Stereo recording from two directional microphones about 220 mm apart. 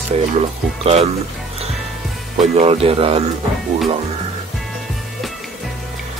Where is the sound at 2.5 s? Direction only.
30° right (ahead or behind).